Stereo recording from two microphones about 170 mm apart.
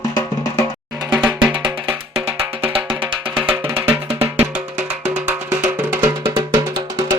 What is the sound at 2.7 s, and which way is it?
Music, 25° right (ahead or behind).